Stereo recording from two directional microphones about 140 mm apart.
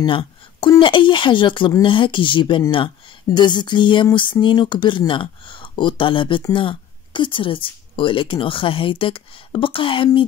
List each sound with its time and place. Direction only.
0.0 s speech: 35° left (ahead or behind)